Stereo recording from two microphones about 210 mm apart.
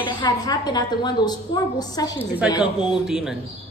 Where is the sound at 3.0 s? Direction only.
Centre (ahead or behind).